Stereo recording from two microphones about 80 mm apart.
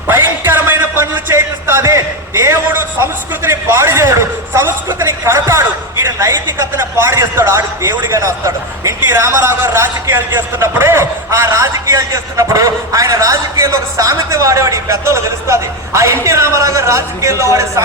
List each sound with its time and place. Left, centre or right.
0.1 s music: right
2.4 s a sound: right
9.0 s a man's voice: right